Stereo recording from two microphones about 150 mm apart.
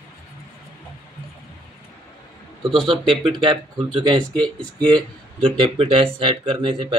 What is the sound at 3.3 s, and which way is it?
Speech, 30° right (ahead or behind).